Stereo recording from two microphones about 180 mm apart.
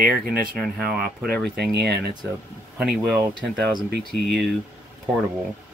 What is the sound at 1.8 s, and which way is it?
Speech, 65° right (ahead or behind).